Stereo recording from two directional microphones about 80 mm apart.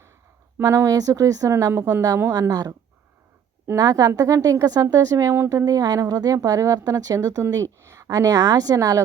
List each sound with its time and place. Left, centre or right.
0.6 s speech: right
0.9 s speech: right
2.5 s speech: right
3.8 s speech: right
4.1 s speech: right